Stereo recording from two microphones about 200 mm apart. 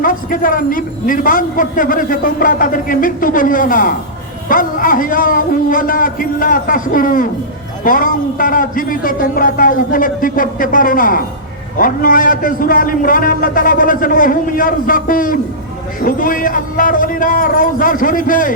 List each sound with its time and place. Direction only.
0.0 s a man's voice: 45° left (ahead or behind)